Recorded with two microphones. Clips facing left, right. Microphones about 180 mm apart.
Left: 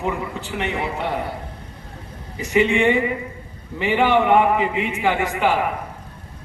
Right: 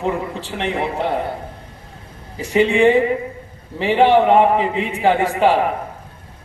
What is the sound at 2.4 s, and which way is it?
A man's voice, 30° right (ahead or behind).